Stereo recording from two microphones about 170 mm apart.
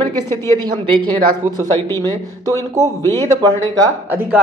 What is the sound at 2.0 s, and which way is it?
Speech, 20° right (ahead or behind).